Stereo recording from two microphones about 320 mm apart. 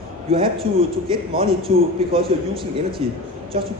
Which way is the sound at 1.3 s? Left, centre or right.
Right.